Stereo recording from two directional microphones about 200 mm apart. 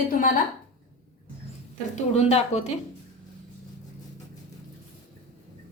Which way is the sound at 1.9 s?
35° left (ahead or behind).